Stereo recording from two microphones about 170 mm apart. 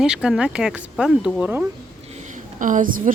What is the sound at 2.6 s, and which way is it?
Speech, 50° right (ahead or behind).